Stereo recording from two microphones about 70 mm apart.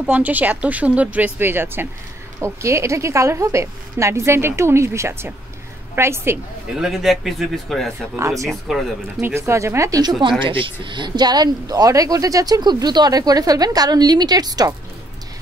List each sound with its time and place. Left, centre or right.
0.0 s speech: right
2.4 s a woman's voice: right
6.7 s a man's voice: centre
8.2 s speech: right
8.5 s a man's voice: centre
9.2 s speech: right
11.0 s speech: right